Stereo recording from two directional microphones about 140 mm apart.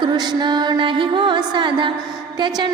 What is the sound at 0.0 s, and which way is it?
Music, 30° right (ahead or behind).